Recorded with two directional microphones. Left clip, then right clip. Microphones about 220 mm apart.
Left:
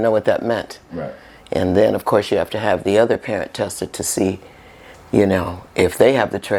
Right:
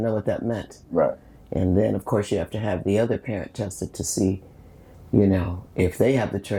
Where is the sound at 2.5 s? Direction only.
25° left (ahead or behind).